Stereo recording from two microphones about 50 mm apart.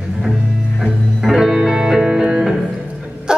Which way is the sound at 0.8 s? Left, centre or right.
Centre.